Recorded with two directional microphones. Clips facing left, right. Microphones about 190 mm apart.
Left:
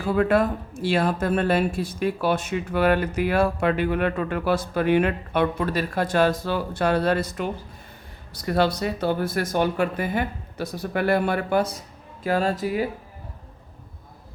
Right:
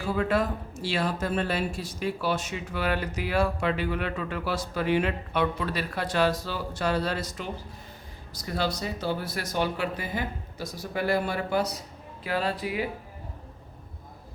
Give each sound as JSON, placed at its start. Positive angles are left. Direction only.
{"t": 0.0, "sound": "speech", "side_deg": 55}